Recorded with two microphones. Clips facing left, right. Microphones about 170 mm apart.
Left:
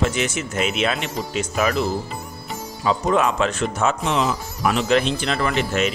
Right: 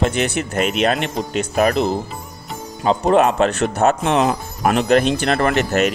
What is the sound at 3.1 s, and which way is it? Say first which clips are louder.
Speech: right 6 dB; 60° right (ahead or behind).